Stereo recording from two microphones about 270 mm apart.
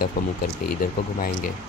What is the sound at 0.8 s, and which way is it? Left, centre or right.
Speech, left.